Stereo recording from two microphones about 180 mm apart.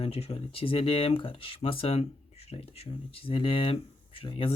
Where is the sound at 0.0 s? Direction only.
35° left (ahead or behind).